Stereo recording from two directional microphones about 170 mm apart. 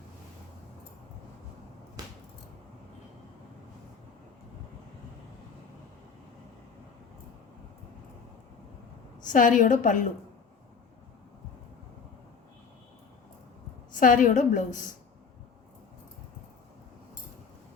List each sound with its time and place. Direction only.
9.2 s a woman's voice: 50° left (ahead or behind)
13.9 s a woman's voice: 50° left (ahead or behind)